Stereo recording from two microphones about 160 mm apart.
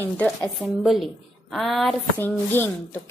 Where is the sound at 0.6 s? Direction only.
5° right (ahead or behind).